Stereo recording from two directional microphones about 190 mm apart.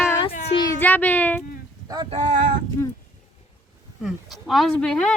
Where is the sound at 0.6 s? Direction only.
15° left (ahead or behind).